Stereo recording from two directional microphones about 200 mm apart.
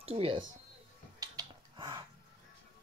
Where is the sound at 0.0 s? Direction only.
30° right (ahead or behind).